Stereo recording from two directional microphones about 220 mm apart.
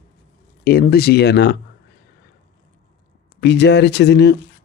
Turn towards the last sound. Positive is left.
turn(degrees=50)  # may be behind; listen again after turning